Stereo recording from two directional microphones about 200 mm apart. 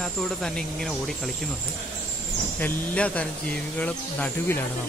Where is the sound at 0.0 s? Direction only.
Centre (ahead or behind).